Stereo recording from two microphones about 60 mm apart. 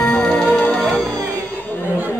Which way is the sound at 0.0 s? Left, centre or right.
Left.